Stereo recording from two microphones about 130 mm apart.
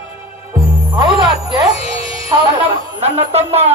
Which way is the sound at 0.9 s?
40° right (ahead or behind).